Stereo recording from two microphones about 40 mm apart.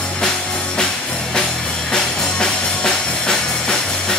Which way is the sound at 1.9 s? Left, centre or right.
Centre.